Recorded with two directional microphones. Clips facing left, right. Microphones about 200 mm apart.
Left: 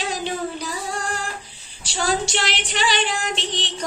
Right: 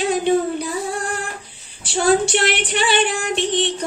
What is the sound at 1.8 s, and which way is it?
Female singing, 55° right (ahead or behind).